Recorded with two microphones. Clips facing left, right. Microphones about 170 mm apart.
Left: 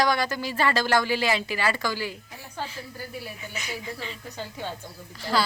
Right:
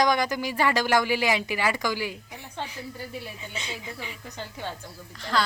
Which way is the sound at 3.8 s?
15° right (ahead or behind).